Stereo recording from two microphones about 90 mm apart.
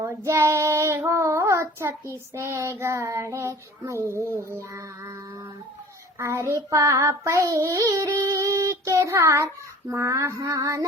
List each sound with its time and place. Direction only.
0.3 s child singing: 30° right (ahead or behind)
6.1 s child singing: 35° right (ahead or behind)